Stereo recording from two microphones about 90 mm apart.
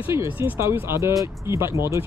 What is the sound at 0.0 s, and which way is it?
Speech, 30° right (ahead or behind).